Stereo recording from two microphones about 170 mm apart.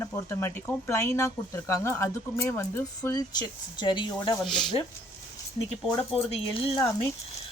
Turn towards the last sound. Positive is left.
turn(degrees=35)  # may be behind; listen again after turning